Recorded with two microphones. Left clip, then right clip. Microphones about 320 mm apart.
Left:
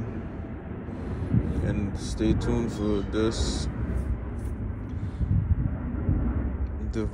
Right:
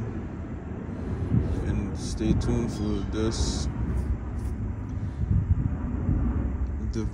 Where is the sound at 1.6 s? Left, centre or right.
Centre.